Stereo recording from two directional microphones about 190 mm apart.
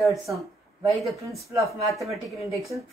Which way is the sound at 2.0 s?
Centre (ahead or behind).